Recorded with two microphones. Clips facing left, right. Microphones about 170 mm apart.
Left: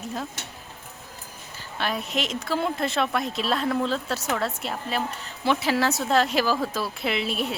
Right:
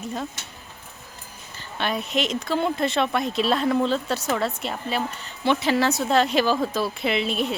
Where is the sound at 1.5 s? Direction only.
Centre (ahead or behind).